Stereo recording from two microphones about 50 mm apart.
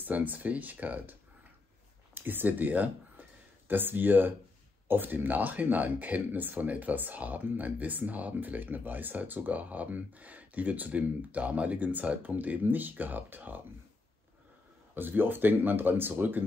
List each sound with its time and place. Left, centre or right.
0.0 s speech: right
2.1 s speech: right
15.0 s speech: right